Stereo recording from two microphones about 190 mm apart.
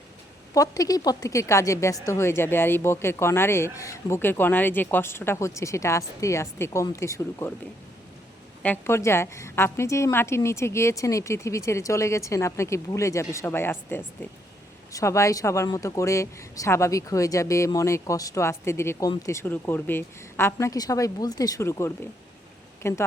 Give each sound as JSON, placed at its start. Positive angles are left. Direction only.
{"t": 0.5, "sound": "speech", "side_deg": 20}
{"t": 8.6, "sound": "speech", "side_deg": 10}